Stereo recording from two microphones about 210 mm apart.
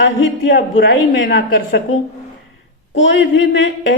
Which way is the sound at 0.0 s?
55° left (ahead or behind).